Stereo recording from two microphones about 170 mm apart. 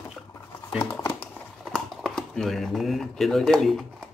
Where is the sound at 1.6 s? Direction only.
Centre (ahead or behind).